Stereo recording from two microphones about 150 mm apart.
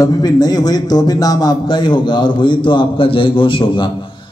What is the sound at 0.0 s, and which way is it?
A man's voice, 25° left (ahead or behind).